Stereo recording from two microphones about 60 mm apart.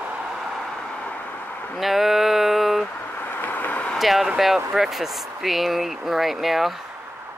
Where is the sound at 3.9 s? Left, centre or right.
Centre.